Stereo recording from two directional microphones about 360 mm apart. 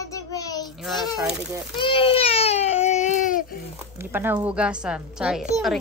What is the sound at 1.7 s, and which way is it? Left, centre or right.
Baby cry, centre.